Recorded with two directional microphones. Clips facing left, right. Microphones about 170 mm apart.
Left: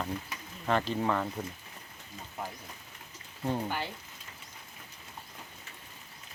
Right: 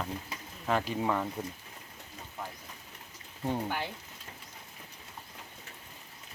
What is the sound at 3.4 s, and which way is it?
Speech, 15° right (ahead or behind).